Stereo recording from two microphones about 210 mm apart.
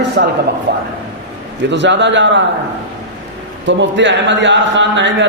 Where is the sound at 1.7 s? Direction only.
55° right (ahead or behind).